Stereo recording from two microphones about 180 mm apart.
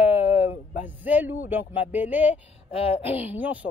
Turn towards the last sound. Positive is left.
turn(degrees=-10)  # may be behind; listen again after turning